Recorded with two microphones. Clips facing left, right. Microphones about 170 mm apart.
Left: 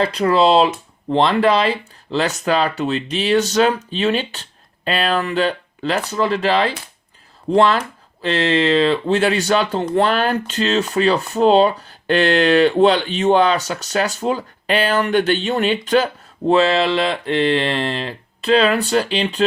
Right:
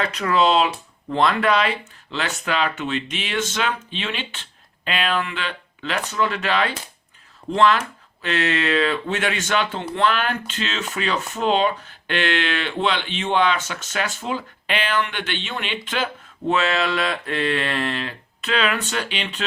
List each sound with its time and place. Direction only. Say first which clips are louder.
0.0 s speech: left 5 dB; 30° left (ahead or behind)